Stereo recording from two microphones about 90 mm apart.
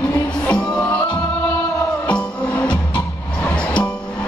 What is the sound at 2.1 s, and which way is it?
Music, 15° left (ahead or behind).